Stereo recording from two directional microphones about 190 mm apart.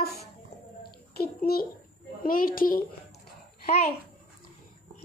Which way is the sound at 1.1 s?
55° left (ahead or behind).